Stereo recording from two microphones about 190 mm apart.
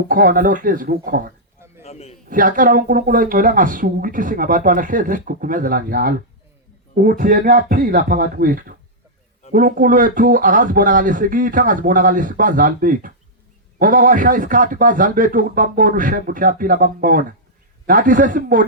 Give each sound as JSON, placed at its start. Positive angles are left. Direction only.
{"t": 0.1, "sound": "speech", "side_deg": -45}
{"t": 1.8, "sound": "a sound", "side_deg": 35}
{"t": 2.3, "sound": "speech", "side_deg": -45}